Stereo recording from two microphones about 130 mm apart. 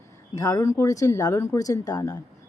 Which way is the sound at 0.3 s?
25° left (ahead or behind).